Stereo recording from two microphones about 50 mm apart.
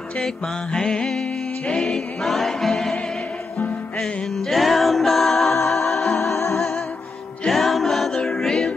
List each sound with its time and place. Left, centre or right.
0.7 s music: centre
2.2 s music: centre
4.0 s music: centre
7.4 s music: centre
8.2 s choir: centre